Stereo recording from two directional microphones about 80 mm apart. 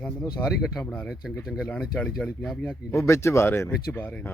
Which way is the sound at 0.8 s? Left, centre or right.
Centre.